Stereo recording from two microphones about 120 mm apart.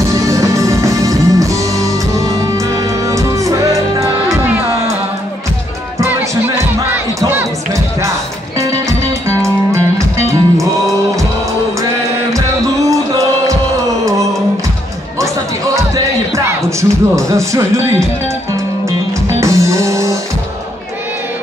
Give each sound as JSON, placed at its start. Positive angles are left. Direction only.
{"t": 0.3, "sound": "music", "side_deg": -25}
{"t": 6.0, "sound": "music", "side_deg": -20}
{"t": 7.2, "sound": "crowd", "side_deg": -20}
{"t": 9.3, "sound": "music", "side_deg": -25}
{"t": 12.9, "sound": "music", "side_deg": -25}
{"t": 16.3, "sound": "music", "side_deg": -25}
{"t": 19.4, "sound": "music", "side_deg": -25}